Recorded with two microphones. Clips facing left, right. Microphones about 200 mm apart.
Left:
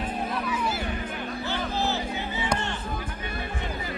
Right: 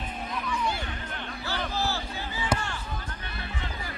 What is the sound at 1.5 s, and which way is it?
Music, 20° left (ahead or behind).